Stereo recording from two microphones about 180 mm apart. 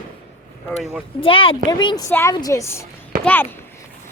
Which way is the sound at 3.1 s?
50° right (ahead or behind).